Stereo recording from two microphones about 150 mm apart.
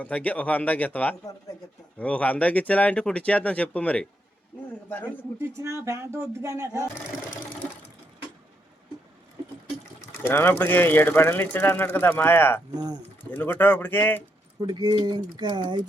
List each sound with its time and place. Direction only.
0.0 s a man's voice: 10° left (ahead or behind)
5.5 s speech: 20° right (ahead or behind)
10.2 s a man's voice: 15° left (ahead or behind)
12.7 s speech: 25° right (ahead or behind)
13.3 s a man's voice: 15° left (ahead or behind)
14.6 s speech: 25° right (ahead or behind)